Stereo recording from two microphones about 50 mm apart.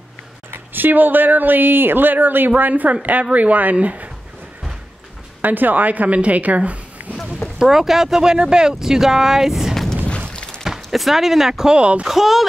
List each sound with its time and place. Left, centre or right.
0.5 s speech: right
5.4 s speech: right
7.5 s speech: centre
10.0 s a sound: centre
10.6 s speech: centre; by 12.0 s right
12.0 s speech: centre